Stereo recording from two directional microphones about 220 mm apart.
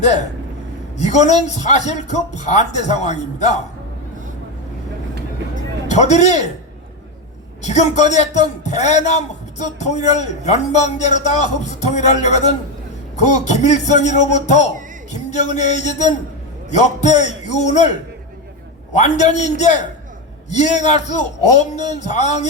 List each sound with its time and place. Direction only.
0.9 s a man's voice: 30° left (ahead or behind)
5.9 s a man's voice: 30° left (ahead or behind)
7.6 s a man's voice: 30° left (ahead or behind)
18.9 s a man's voice: 30° left (ahead or behind)